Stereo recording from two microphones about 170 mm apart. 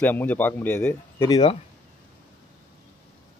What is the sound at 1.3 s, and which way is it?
Speech, 30° left (ahead or behind).